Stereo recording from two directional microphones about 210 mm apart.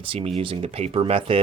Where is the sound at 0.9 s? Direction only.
25° right (ahead or behind).